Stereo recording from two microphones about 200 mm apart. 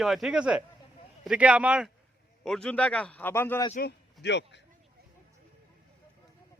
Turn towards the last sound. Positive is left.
turn(degrees=60)  # may be behind; listen again after turning